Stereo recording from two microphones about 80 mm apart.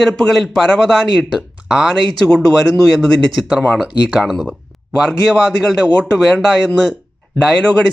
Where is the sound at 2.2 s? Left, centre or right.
Centre.